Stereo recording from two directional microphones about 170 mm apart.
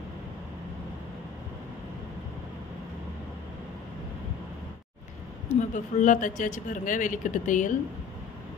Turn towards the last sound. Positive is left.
turn(degrees=50)  # may be behind; listen again after turning